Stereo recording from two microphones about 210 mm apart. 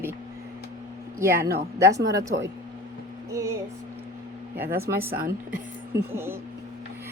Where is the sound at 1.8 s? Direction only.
15° right (ahead or behind).